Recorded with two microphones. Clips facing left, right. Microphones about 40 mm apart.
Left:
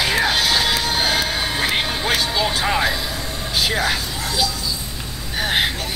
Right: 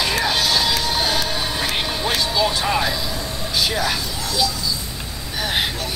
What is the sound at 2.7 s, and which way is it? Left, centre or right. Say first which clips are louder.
Vehicle: left 1 dB; centre.